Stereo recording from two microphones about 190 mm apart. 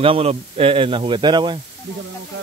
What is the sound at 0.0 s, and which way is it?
Speech, 30° right (ahead or behind).